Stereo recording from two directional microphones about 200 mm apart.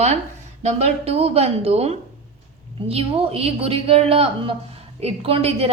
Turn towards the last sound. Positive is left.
turn(degrees=-30)  # may be behind; listen again after turning